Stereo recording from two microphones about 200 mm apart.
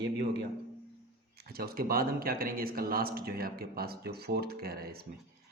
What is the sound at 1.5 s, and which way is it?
Speech, 50° right (ahead or behind).